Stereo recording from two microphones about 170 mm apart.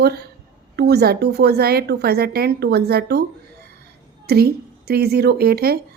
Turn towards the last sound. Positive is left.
turn(degrees=-65)  # may be behind; listen again after turning